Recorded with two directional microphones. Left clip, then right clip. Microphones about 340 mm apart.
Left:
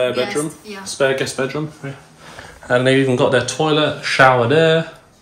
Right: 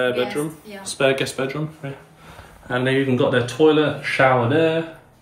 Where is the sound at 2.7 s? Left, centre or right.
Centre.